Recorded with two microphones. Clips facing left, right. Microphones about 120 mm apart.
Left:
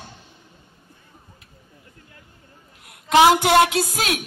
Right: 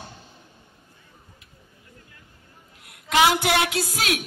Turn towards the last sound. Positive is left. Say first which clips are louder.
# left 3 dB
turn(degrees=25)  # may be behind; listen again after turning